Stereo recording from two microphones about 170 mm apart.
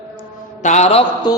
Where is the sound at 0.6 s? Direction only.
45° left (ahead or behind).